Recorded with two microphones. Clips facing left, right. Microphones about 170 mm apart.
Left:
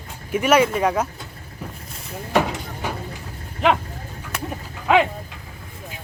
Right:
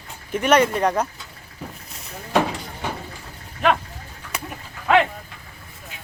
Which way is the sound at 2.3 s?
5° left (ahead or behind).